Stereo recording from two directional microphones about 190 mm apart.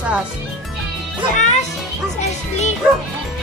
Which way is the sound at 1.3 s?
40° left (ahead or behind).